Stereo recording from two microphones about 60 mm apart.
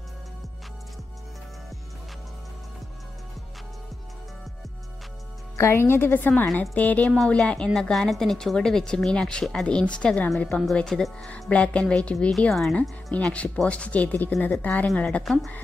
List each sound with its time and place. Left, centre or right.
5.6 s a woman's voice: left; by 7.7 s centre
7.9 s speech: centre
10.7 s speech: centre
11.5 s speech: centre
13.1 s speech: left